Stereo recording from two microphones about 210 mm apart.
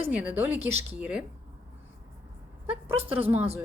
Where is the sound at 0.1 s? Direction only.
5° right (ahead or behind).